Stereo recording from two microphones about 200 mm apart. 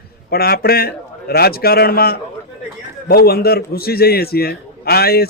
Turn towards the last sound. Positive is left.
turn(degrees=50)  # may be behind; listen again after turning